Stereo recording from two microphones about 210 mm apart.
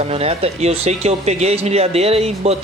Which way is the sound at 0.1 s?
30° right (ahead or behind).